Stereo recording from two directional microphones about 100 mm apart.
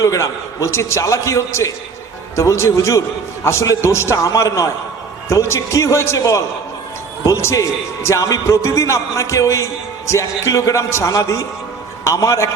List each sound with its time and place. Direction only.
0.0 s a man's voice: 35° left (ahead or behind)